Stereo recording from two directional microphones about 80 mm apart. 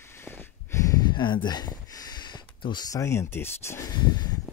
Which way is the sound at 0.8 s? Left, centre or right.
Left.